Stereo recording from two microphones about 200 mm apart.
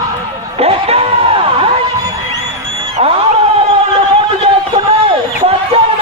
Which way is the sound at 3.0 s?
30° right (ahead or behind).